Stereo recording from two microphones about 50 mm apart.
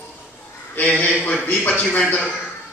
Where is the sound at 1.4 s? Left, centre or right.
Left.